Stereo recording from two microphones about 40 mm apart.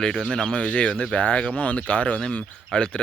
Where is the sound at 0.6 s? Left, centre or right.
Left.